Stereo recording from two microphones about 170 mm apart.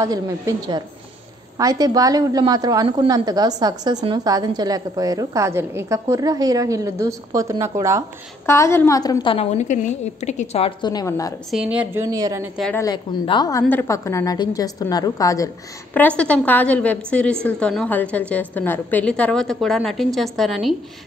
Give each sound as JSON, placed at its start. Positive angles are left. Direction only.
{"t": 0.0, "sound": "a woman's voice", "side_deg": -20}
{"t": 8.5, "sound": "a woman's voice", "side_deg": 15}
{"t": 10.8, "sound": "a woman's voice", "side_deg": 25}
{"t": 11.5, "sound": "a woman's voice", "side_deg": -5}
{"t": 12.0, "sound": "a woman's voice", "side_deg": -20}
{"t": 12.7, "sound": "a woman's voice", "side_deg": 25}